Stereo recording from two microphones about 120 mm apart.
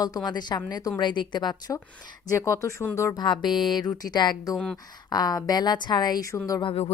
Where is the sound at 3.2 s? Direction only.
40° left (ahead or behind).